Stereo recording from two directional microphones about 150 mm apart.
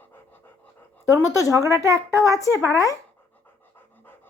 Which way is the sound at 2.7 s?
20° left (ahead or behind).